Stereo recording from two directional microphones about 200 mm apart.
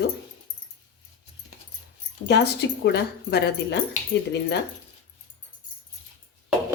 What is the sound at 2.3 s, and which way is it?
Speech, 55° left (ahead or behind).